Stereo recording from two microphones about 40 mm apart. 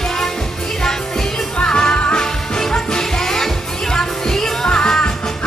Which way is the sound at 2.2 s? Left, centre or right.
Centre.